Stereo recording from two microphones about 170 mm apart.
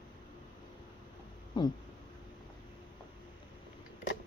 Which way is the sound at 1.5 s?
25° left (ahead or behind).